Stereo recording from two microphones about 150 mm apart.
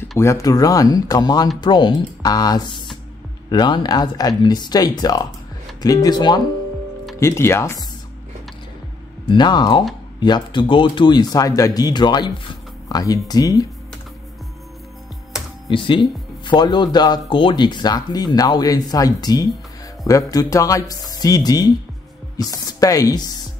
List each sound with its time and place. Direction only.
0.2 s speech: 20° left (ahead or behind)
7.2 s speech: 15° left (ahead or behind)
9.3 s speech: 30° left (ahead or behind)
15.7 s speech: 30° left (ahead or behind)